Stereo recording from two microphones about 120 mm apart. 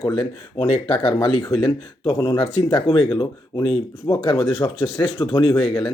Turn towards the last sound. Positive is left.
turn(degrees=40)  # may be behind; listen again after turning